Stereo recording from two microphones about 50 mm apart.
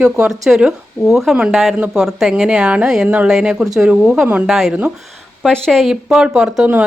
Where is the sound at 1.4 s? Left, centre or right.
Centre.